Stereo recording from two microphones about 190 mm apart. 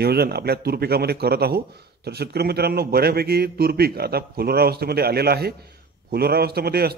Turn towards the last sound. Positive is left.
turn(degrees=-55)  # may be behind; listen again after turning